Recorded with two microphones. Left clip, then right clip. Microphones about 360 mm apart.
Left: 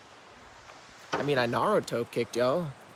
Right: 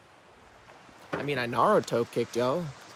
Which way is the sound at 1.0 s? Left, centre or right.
Centre.